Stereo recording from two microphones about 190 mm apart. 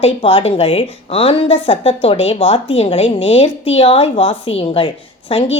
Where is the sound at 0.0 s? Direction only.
30° left (ahead or behind).